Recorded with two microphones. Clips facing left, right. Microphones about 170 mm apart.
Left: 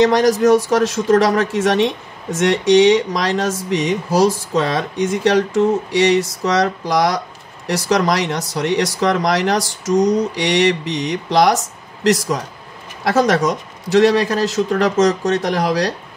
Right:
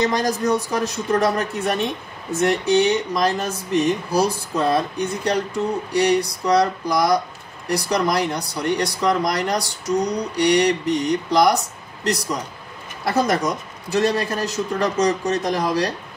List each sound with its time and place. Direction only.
0.0 s speech: 90° left